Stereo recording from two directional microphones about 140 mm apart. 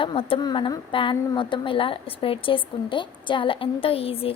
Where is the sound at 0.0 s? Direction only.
40° left (ahead or behind).